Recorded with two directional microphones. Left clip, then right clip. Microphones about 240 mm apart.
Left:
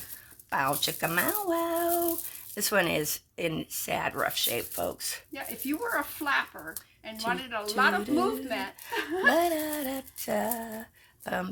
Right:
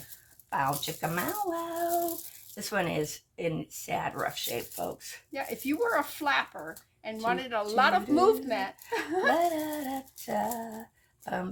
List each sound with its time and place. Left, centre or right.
0.5 s a child's voice: left
5.3 s speech: right
9.3 s speech: left